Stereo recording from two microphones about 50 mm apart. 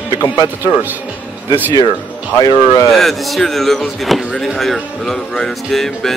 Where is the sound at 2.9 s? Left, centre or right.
Centre.